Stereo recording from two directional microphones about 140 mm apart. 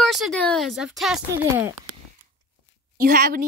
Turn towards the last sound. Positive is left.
turn(degrees=-80)